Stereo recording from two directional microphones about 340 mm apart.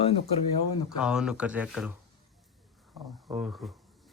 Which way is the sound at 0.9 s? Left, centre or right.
Centre.